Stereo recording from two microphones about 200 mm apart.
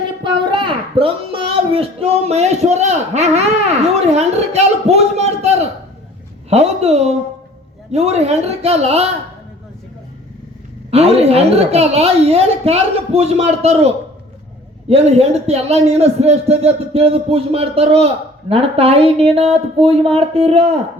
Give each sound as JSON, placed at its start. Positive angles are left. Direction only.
{"t": 0.2, "sound": "a man's voice", "side_deg": -25}
{"t": 10.9, "sound": "a woman's voice", "side_deg": -30}